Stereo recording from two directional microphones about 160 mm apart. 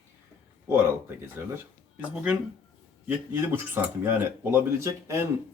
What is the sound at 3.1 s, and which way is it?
Speech, 15° right (ahead or behind).